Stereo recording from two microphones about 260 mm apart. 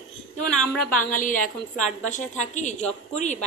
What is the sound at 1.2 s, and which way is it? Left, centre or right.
A woman's voice, left.